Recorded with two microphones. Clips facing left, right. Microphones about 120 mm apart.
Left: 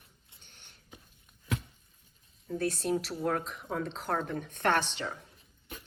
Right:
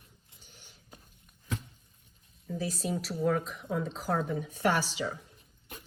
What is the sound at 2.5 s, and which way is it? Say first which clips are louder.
Speech: left 3 dB; centre (ahead or behind).